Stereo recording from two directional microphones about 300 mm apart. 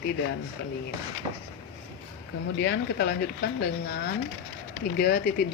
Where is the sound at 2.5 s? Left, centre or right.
Left.